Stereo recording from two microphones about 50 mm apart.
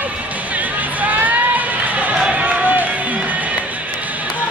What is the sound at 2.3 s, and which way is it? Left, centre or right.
Music, right.